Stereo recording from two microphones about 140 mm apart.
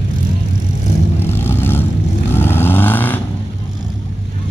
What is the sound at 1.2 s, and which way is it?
Vehicle, 15° left (ahead or behind).